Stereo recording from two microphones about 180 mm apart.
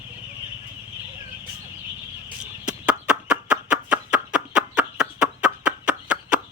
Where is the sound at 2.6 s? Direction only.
5° right (ahead or behind).